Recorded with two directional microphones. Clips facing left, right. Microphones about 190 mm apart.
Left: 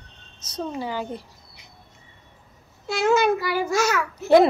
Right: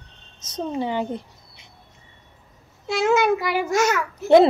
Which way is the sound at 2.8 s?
20° right (ahead or behind).